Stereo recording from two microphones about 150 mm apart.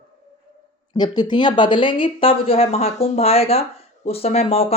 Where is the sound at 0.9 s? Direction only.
30° left (ahead or behind).